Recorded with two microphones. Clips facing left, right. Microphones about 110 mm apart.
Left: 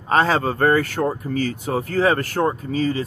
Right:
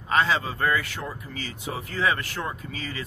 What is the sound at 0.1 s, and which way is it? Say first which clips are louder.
Speech: left 5 dB; 40° left (ahead or behind).